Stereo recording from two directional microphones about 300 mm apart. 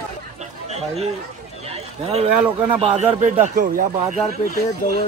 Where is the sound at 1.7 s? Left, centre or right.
Right.